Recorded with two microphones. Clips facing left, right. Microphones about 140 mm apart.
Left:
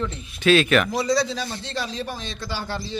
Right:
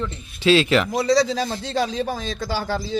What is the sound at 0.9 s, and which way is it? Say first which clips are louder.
Speech: right 4 dB; 80° right.